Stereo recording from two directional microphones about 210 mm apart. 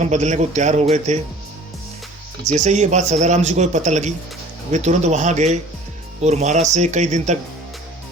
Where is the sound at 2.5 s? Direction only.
35° right (ahead or behind).